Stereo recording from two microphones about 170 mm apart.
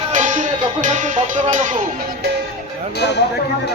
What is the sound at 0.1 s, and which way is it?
Music, 45° right (ahead or behind).